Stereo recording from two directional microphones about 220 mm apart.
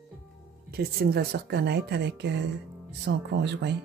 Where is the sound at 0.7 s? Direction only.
45° right (ahead or behind).